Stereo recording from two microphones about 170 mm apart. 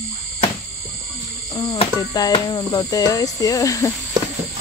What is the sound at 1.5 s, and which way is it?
Cricket, 20° left (ahead or behind).